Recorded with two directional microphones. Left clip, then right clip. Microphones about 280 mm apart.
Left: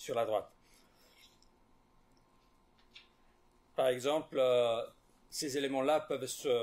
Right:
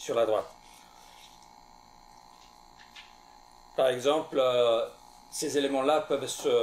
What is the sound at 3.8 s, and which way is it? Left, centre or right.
Speech, left.